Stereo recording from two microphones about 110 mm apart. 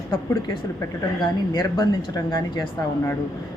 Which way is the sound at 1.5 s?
40° left (ahead or behind).